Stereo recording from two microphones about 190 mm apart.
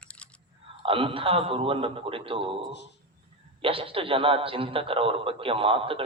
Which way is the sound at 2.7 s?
65° left (ahead or behind).